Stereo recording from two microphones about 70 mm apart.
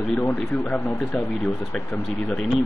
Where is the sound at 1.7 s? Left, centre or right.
Centre.